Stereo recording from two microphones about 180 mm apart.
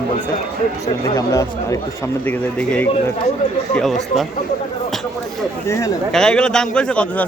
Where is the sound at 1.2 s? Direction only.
15° left (ahead or behind); by 4.2 s centre (ahead or behind).